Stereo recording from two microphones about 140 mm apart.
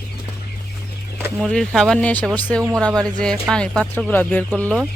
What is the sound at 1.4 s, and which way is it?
Speech, centre (ahead or behind).